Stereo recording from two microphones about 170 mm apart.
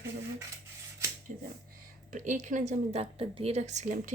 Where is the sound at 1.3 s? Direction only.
50° right (ahead or behind).